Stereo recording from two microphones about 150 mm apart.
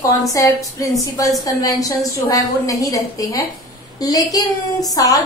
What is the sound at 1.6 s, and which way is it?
A woman's voice, 25° left (ahead or behind).